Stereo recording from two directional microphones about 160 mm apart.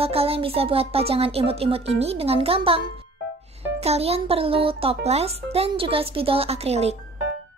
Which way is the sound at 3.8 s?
40° right (ahead or behind).